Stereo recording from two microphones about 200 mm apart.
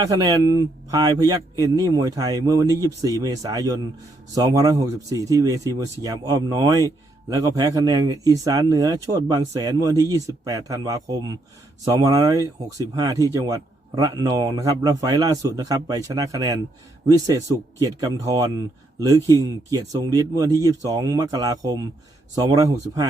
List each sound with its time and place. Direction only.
0.0 s a man's voice: 20° right (ahead or behind)